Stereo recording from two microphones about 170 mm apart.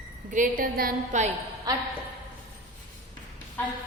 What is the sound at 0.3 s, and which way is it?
A woman's voice, 50° right (ahead or behind).